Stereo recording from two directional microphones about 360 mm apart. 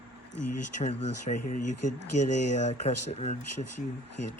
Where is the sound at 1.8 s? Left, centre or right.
Left.